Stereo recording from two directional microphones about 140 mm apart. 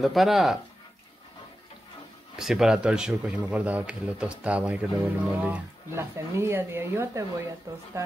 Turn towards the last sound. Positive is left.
turn(degrees=-25)  # may be behind; listen again after turning